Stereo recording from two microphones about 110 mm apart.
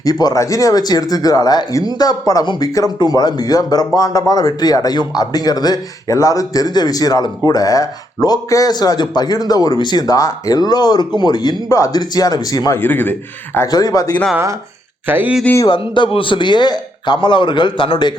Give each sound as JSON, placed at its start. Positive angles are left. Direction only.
{"t": 0.0, "sound": "speech", "side_deg": 35}
{"t": 12.8, "sound": "a man's voice", "side_deg": 20}
{"t": 13.7, "sound": "speech", "side_deg": 35}
{"t": 15.0, "sound": "speech", "side_deg": -15}
{"t": 15.6, "sound": "a man's voice", "side_deg": 45}